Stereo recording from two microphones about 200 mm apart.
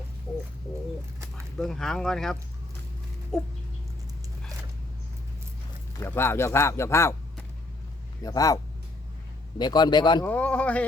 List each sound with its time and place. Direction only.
1.5 s speech: centre (ahead or behind)
6.0 s speech: 10° left (ahead or behind)
8.2 s speech: 15° left (ahead or behind)
9.6 s a man's voice: 20° left (ahead or behind)
10.2 s speech: 5° left (ahead or behind)